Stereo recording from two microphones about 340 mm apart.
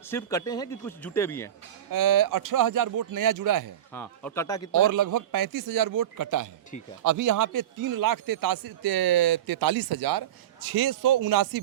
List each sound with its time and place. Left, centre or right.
0.1 s speech: centre
1.9 s speech: right
3.9 s speech: centre
4.8 s a man's voice: right